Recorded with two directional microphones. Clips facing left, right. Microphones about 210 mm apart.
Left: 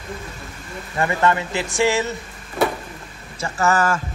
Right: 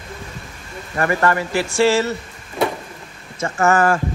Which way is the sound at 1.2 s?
20° left (ahead or behind).